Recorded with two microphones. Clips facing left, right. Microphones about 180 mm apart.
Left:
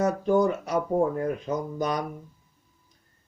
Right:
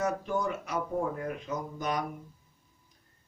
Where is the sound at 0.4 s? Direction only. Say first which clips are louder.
Left 7 dB; 35° left (ahead or behind).